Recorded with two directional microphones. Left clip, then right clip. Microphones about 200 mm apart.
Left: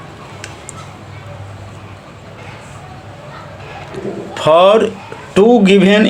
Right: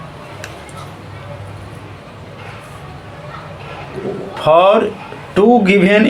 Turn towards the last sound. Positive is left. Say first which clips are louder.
# left 1 dB
turn(degrees=35)  # may be behind; listen again after turning